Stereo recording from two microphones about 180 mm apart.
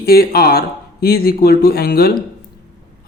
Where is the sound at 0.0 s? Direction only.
60° left (ahead or behind).